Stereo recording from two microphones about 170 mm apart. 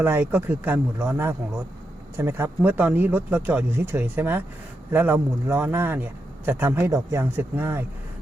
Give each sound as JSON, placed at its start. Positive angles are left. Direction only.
{"t": 0.0, "sound": "speech", "side_deg": -10}